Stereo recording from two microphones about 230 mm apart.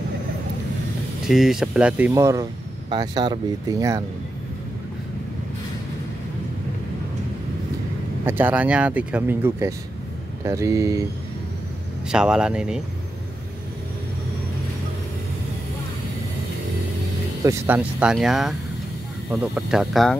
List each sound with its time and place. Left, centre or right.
1.3 s speech: centre
8.3 s speech: centre
12.1 s speech: centre
17.4 s speech: centre